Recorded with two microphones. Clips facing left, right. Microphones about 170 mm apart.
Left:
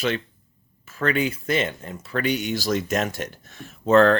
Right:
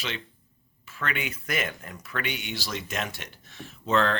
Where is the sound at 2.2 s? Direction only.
40° left (ahead or behind).